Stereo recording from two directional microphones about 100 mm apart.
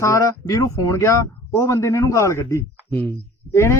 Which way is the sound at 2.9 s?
15° left (ahead or behind).